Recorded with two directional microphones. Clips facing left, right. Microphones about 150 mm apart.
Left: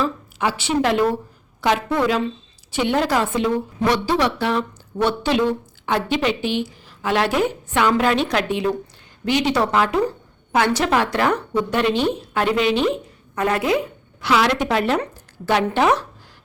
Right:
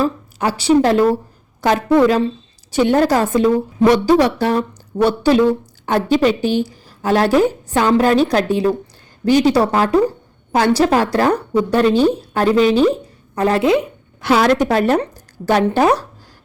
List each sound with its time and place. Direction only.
0.0 s a woman's voice: 40° right (ahead or behind); by 13.8 s 25° right (ahead or behind)
14.2 s a woman's voice: 45° right (ahead or behind)